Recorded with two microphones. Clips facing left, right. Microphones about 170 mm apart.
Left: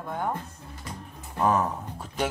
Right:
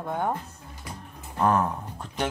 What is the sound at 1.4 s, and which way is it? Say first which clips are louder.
Speech: right 1 dB; centre (ahead or behind).